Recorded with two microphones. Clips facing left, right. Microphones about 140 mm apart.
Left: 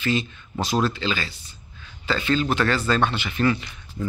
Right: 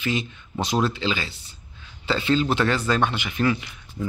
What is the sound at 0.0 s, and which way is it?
A man's voice, 15° right (ahead or behind).